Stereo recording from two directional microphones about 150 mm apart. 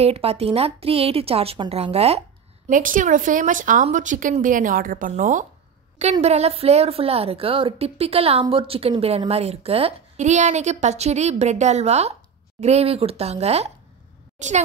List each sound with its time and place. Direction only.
0.0 s a woman's voice: 40° right (ahead or behind)
2.7 s a woman's voice: 60° right (ahead or behind)